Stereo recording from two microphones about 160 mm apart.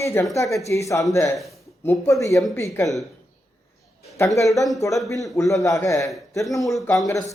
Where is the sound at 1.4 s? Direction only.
Centre (ahead or behind).